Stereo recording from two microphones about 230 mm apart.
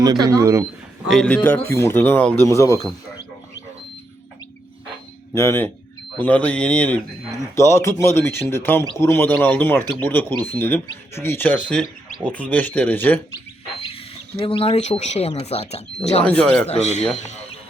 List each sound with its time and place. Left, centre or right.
0.0 s speech: centre
1.0 s speech: centre
5.3 s speech: centre
14.4 s speech: left
16.2 s speech: centre
16.6 s speech: left